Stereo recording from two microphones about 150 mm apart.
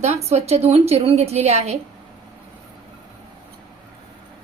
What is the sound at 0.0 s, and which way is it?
A woman's voice, 45° right (ahead or behind).